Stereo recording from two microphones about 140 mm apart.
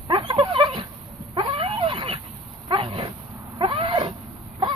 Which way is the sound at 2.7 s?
40° right (ahead or behind).